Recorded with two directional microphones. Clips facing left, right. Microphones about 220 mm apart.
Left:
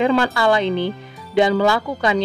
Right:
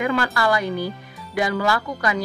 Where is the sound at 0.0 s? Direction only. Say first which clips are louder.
Left 5 dB; 25° left (ahead or behind).